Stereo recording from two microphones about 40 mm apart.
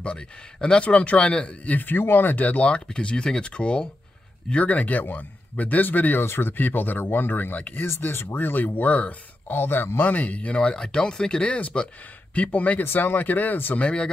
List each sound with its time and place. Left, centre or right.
0.0 s speech: left
1.7 s speech: left
4.6 s a man's voice: left
6.2 s speech: left
8.1 s speech: left
8.5 s speech: left
9.5 s speech: left
10.0 s speech: left
12.8 s speech: left
13.7 s speech: left